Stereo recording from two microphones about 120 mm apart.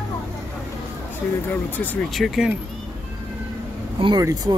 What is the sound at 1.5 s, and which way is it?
Speech, 15° left (ahead or behind).